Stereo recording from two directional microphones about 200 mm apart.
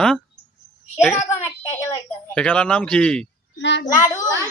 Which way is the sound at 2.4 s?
5° left (ahead or behind).